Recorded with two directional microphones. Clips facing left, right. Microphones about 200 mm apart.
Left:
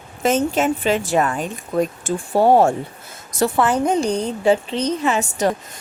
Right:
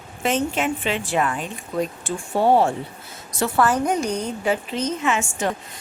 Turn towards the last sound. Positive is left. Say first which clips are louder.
# left 4 dB
turn(degrees=40)  # may be behind; listen again after turning